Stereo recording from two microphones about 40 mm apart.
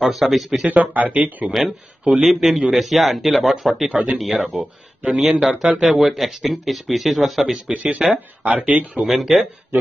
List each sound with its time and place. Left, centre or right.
0.0 s a man's voice: centre
0.7 s speech: right
1.5 s a man's voice: centre
7.7 s speech: right
8.1 s speech: right
8.5 s speech: right
9.0 s speech: centre